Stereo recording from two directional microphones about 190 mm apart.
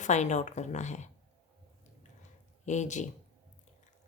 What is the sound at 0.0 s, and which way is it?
A woman's voice, 40° left (ahead or behind).